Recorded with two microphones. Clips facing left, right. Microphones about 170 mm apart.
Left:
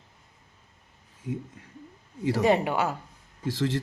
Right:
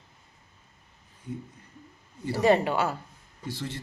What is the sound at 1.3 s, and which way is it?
Speech, 90° left.